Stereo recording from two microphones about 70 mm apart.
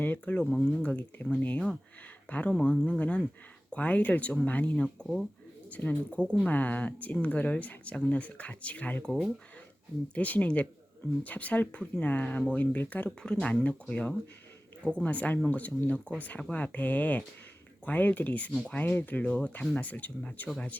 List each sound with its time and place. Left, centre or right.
0.0 s speech: left
10.2 s speech: left